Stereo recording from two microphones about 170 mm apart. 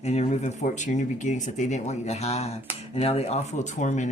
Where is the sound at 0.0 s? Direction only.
40° left (ahead or behind).